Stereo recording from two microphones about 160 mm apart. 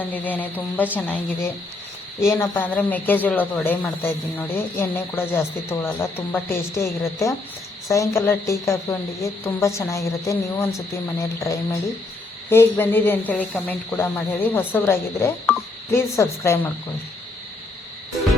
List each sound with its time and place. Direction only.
0.0 s speech: 10° left (ahead or behind)